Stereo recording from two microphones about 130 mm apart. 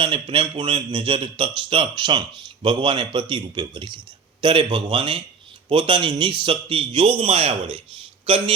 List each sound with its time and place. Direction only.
0.0 s a man's voice: 40° right (ahead or behind)